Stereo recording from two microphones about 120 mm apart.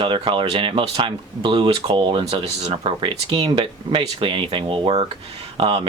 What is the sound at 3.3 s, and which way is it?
Speech, 45° right (ahead or behind).